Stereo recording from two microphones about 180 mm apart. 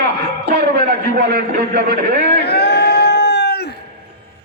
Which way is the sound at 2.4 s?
65° left (ahead or behind).